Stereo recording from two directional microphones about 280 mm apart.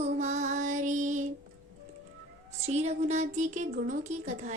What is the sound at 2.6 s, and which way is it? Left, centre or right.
Speech, right.